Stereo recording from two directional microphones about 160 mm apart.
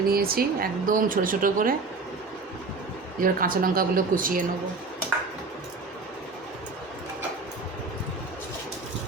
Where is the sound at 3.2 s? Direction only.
60° right (ahead or behind).